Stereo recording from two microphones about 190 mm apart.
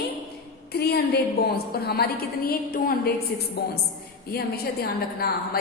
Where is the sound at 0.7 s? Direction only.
55° left (ahead or behind).